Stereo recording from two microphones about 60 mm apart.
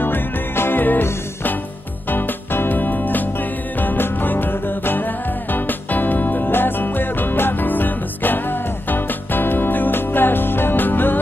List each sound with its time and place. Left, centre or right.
0.0 s music: left
2.0 s music: left